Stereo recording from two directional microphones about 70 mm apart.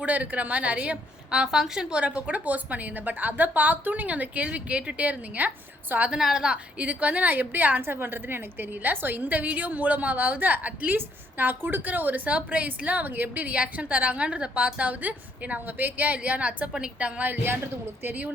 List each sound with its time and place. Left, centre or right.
0.0 s a woman's voice: right
6.1 s a woman's voice: centre
17.3 s a woman's voice: right